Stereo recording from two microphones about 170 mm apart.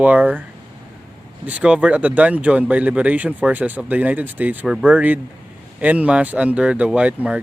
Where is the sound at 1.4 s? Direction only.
10° right (ahead or behind).